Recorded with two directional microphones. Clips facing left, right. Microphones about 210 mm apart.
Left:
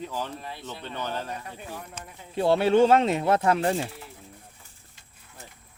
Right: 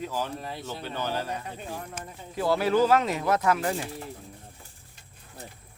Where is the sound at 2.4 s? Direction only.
25° left (ahead or behind).